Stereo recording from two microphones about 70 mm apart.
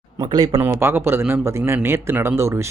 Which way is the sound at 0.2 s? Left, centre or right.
Right.